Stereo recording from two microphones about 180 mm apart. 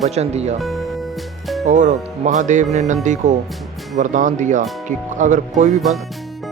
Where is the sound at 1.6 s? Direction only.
45° right (ahead or behind).